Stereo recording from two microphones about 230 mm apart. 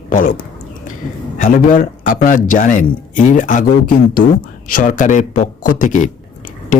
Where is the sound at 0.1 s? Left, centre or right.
Left.